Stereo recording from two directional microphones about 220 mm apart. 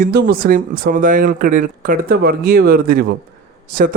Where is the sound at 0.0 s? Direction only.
45° right (ahead or behind).